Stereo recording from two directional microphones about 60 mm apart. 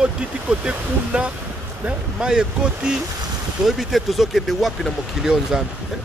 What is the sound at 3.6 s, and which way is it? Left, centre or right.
Speech, centre.